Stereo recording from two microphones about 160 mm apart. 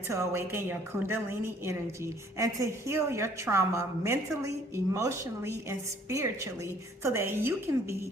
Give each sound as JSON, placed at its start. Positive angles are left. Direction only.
{"t": 0.1, "sound": "a woman's voice", "side_deg": -15}